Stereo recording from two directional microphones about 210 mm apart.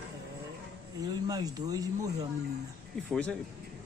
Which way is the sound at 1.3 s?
20° right (ahead or behind).